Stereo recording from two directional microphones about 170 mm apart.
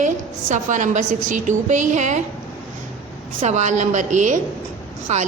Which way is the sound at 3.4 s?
45° right (ahead or behind).